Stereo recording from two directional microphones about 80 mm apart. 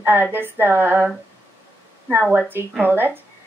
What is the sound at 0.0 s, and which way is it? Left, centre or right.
A woman's voice, right.